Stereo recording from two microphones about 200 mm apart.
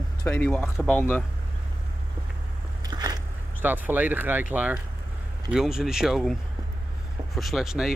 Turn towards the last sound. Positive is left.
turn(degrees=0)  # may be behind; listen again after turning